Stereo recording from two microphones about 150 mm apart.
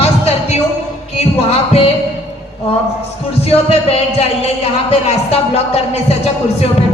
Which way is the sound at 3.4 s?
40° left (ahead or behind).